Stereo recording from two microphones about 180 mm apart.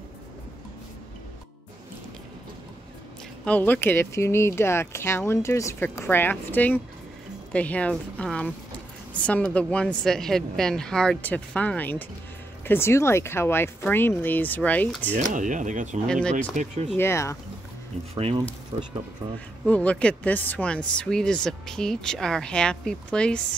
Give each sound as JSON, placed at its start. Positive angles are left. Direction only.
{"t": 3.4, "sound": "speech", "side_deg": 10}
{"t": 15.1, "sound": "speech", "side_deg": -45}
{"t": 16.1, "sound": "speech", "side_deg": 5}
{"t": 18.1, "sound": "speech", "side_deg": -30}
{"t": 19.6, "sound": "speech", "side_deg": 5}